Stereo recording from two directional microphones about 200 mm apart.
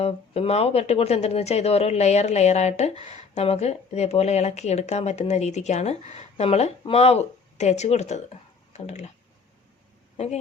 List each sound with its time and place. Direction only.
0.0 s speech: 30° left (ahead or behind)